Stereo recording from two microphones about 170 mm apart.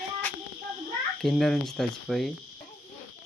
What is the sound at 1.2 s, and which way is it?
Speech, centre (ahead or behind).